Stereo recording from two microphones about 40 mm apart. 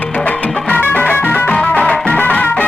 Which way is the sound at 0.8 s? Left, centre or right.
Left.